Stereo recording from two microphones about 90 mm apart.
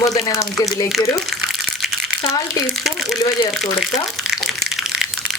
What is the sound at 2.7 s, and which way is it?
Speech, centre (ahead or behind).